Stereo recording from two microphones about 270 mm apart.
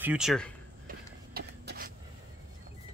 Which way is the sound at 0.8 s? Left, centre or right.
Right.